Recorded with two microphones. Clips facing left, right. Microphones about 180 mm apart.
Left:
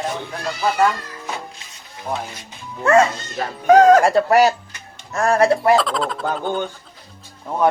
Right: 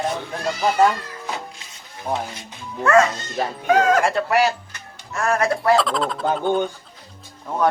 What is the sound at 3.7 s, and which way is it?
Speech, 40° left (ahead or behind).